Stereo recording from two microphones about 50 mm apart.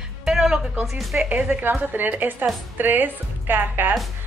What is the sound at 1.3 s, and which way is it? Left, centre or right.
Speech, right.